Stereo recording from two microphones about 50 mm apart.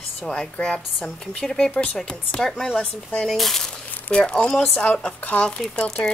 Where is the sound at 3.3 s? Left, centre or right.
Centre.